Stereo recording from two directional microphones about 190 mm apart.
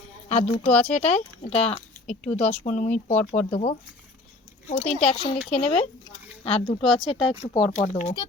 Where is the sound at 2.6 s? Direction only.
40° left (ahead or behind).